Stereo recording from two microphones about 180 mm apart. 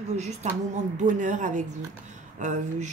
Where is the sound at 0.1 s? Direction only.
40° right (ahead or behind).